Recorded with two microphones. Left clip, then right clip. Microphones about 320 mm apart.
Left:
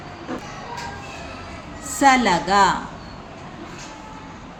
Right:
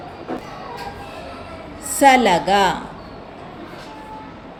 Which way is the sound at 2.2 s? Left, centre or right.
Left.